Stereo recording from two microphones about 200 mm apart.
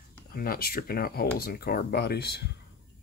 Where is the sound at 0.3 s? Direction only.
50° left (ahead or behind).